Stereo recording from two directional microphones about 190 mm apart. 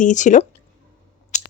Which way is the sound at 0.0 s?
40° left (ahead or behind).